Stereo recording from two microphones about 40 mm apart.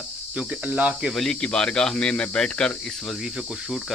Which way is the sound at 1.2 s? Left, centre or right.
Centre.